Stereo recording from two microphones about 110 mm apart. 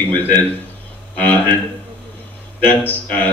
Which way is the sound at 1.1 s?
15° left (ahead or behind).